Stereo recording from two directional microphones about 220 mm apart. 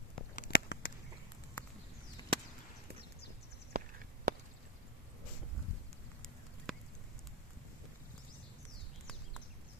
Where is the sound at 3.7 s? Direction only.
45° right (ahead or behind).